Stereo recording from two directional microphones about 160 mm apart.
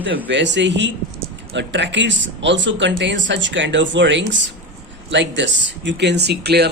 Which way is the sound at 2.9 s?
90° right.